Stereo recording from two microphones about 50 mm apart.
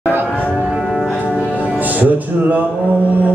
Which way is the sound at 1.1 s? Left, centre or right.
Right.